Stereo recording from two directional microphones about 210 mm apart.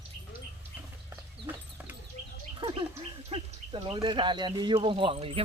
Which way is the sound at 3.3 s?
25° right (ahead or behind).